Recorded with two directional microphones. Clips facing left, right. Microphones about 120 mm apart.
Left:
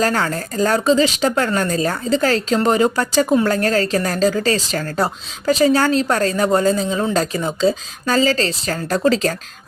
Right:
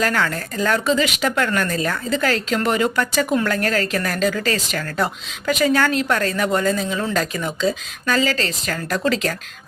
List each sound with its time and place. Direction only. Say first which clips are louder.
0.0 s a woman's voice: left 2 dB; 35° left (ahead or behind)